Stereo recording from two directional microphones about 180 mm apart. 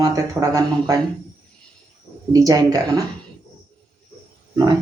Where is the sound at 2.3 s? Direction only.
20° right (ahead or behind).